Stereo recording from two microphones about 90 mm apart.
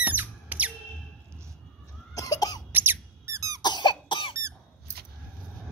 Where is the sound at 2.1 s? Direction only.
40° left (ahead or behind).